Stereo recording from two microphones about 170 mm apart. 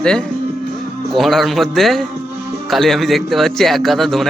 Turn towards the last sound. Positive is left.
turn(degrees=0)  # may be behind; listen again after turning